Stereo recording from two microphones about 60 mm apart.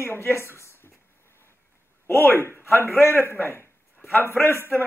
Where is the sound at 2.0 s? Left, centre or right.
Left.